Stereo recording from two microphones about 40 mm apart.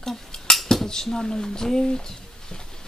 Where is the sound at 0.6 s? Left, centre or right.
Centre.